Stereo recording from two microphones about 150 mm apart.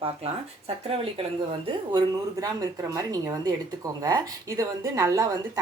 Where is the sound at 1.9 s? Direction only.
25° right (ahead or behind).